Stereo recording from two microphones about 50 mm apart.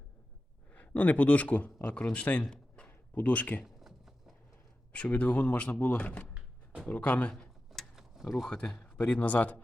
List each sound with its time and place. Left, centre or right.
0.7 s speech: left
2.5 s a sound: centre
3.2 s speech: left
3.6 s a sound: centre
4.9 s speech: left
7.7 s mechanisms: centre
8.2 s speech: centre
8.4 s speech: centre